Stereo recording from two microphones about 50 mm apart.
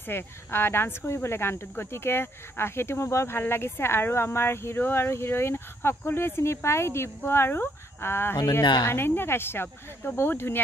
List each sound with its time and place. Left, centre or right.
0.0 s speech: left
5.1 s speech: left
8.5 s speech: left